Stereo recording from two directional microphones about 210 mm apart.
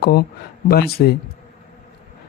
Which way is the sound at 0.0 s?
50° left (ahead or behind).